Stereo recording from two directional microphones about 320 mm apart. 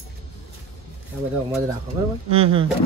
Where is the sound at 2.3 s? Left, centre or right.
Centre.